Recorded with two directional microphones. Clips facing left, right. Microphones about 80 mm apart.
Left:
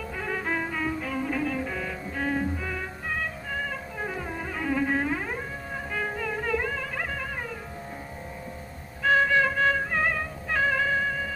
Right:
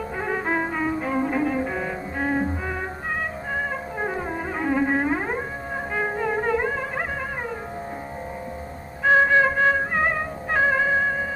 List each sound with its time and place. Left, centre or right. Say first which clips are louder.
0.2 s music: right 5 dB; right
9.0 s music: right 4 dB; right